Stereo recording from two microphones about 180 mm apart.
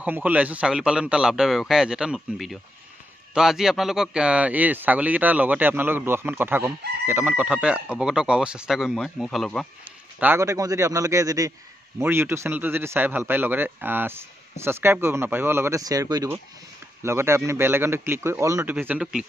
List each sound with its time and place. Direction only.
0.0 s speech: 10° right (ahead or behind)
10.2 s speech: 15° right (ahead or behind)